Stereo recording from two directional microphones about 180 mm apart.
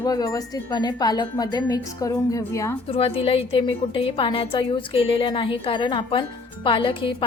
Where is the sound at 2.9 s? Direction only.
30° left (ahead or behind).